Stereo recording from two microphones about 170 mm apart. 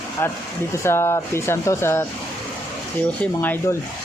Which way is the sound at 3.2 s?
10° left (ahead or behind).